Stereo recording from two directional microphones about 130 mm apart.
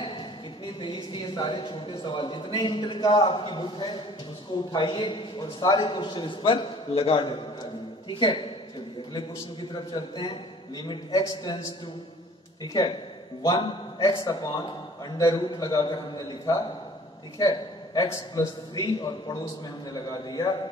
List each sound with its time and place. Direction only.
0.7 s speech: 35° left (ahead or behind)
9.9 s speech: 35° left (ahead or behind)
13.4 s a man's voice: 30° left (ahead or behind)